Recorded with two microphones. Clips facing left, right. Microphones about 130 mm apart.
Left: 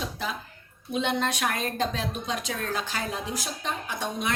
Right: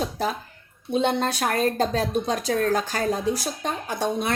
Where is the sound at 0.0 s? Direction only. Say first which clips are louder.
Right 7 dB; 40° right (ahead or behind).